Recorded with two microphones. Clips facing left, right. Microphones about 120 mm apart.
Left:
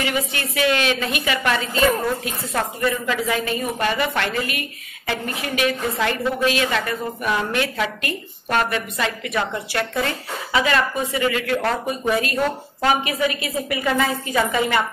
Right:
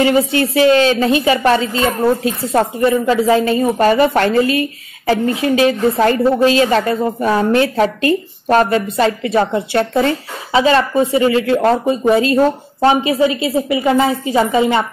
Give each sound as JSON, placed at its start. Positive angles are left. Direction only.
{"t": 0.0, "sound": "a woman's voice", "side_deg": -30}